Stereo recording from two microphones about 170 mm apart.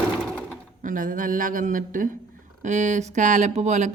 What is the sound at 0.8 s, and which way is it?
Speech, 50° right (ahead or behind).